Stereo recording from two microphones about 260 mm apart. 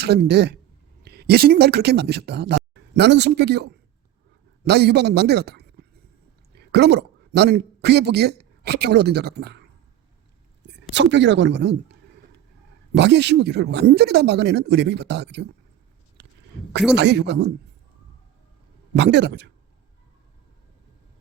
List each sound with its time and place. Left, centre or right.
0.0 s a man's voice: right
10.9 s speech: right
13.0 s speech: right
16.9 s speech: right
18.9 s speech: right